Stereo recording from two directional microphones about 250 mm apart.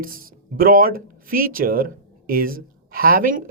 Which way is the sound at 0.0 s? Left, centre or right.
Right.